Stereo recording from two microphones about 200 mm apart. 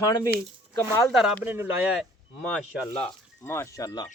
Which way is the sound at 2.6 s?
30° left (ahead or behind).